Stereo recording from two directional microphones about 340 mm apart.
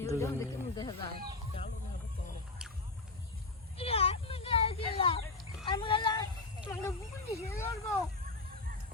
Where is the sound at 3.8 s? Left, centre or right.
Centre.